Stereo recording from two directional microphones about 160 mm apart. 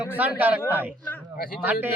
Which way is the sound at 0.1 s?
10° right (ahead or behind).